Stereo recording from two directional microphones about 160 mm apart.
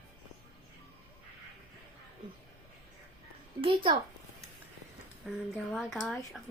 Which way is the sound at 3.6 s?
35° right (ahead or behind).